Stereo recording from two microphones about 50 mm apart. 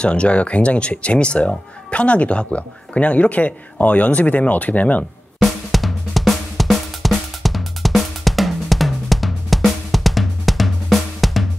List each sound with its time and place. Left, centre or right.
0.0 s speech: left
5.4 s drum: centre